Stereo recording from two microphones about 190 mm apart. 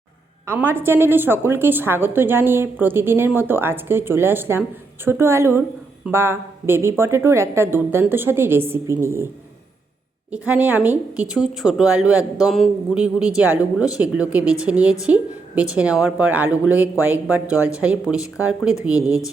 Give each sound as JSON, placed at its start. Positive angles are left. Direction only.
{"t": 0.4, "sound": "a woman's voice", "side_deg": -10}
{"t": 10.3, "sound": "a woman's voice", "side_deg": -5}
{"t": 18.9, "sound": "speech", "side_deg": 15}